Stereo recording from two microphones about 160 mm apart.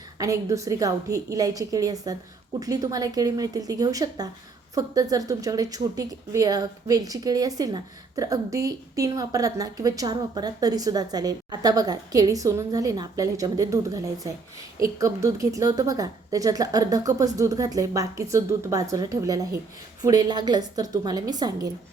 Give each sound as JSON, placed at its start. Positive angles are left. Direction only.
{"t": 0.2, "sound": "speech", "side_deg": -20}